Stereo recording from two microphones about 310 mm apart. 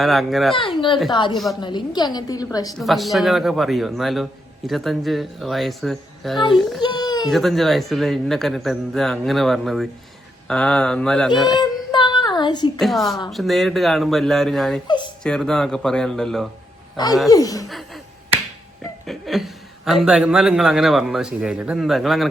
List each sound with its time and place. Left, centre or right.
0.0 s a man's voice: centre
0.5 s a woman's voice: centre
2.8 s a man's voice: centre
6.8 s baby cry: centre
7.3 s a man's voice: centre
11.6 s a sound: centre
12.8 s a man's voice: centre
14.8 s speech: centre
15.2 s a man's voice: centre
17.7 s a sound: centre
19.0 s a man's voice: centre